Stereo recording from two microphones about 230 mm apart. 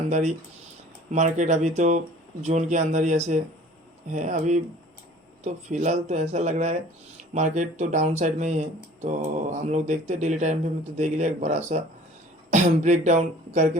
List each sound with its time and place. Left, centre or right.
0.1 s speech: right